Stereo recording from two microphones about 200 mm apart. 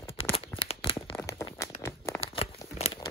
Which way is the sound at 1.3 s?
15° left (ahead or behind).